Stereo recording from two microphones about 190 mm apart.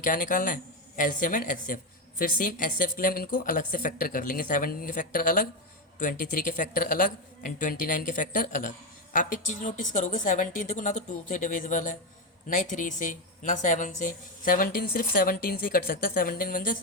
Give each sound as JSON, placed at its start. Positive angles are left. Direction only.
{"t": 0.0, "sound": "speech", "side_deg": 45}